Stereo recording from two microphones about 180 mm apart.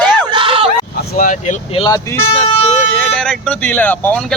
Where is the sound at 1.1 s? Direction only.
45° left (ahead or behind).